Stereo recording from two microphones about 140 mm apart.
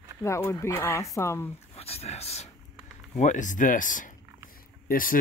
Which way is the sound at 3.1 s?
60° left (ahead or behind).